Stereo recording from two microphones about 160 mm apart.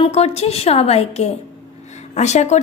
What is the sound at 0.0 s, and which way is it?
A woman's voice, 40° left (ahead or behind).